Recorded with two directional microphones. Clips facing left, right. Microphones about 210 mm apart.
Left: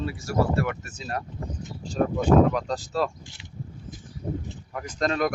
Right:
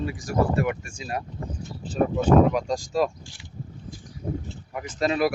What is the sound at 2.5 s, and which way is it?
Speech, 10° right (ahead or behind).